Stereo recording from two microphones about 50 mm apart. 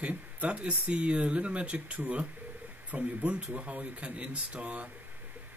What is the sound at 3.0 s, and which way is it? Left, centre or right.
Speech, right.